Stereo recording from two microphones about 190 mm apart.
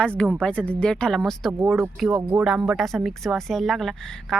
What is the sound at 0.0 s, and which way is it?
Speech, 5° left (ahead or behind).